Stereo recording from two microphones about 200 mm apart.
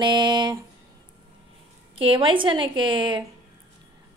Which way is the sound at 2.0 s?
25° right (ahead or behind).